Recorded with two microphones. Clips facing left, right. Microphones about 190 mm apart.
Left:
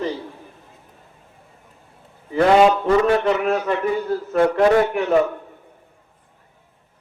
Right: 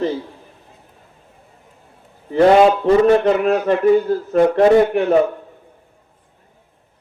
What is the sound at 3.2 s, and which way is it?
Speech, 45° right (ahead or behind).